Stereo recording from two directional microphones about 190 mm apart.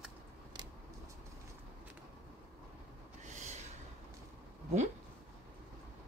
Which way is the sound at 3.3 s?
40° right (ahead or behind).